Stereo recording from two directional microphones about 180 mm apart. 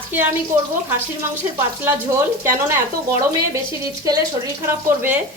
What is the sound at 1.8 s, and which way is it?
Speech, 15° right (ahead or behind).